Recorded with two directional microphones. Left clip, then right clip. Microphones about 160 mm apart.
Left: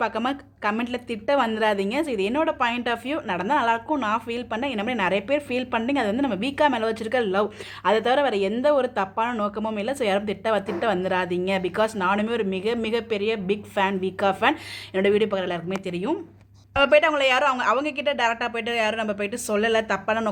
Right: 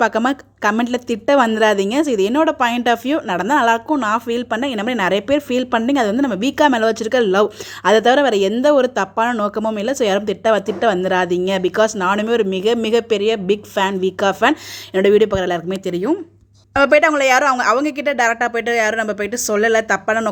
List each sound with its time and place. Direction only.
0.0 s a woman's voice: 45° right (ahead or behind)
16.7 s a woman's voice: 25° right (ahead or behind)